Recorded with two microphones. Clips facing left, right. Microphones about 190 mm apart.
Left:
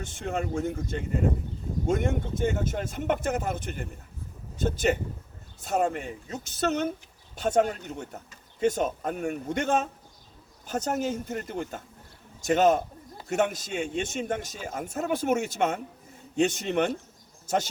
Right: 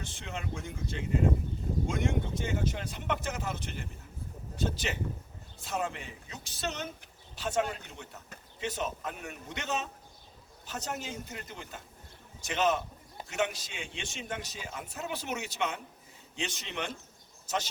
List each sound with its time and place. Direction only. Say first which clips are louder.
0.0 s a man's voice: left 9 dB; 50° left (ahead or behind)